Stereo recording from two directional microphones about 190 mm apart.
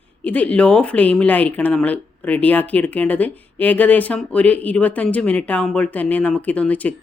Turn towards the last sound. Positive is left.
turn(degrees=10)  # may be behind; listen again after turning